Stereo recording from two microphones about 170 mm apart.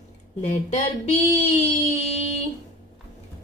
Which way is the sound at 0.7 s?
45° left (ahead or behind).